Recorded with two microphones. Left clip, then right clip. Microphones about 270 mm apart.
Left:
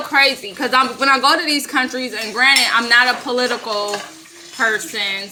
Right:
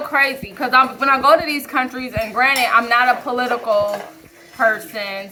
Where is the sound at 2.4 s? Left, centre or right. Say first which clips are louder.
Left 2 dB; left.